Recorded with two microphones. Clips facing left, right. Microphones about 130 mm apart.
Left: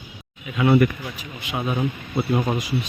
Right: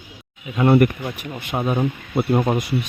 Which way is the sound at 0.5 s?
45° right (ahead or behind).